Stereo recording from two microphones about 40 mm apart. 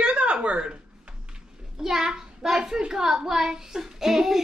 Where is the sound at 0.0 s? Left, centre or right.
Right.